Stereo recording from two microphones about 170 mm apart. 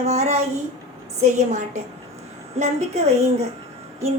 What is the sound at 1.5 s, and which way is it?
A woman's voice, 40° right (ahead or behind).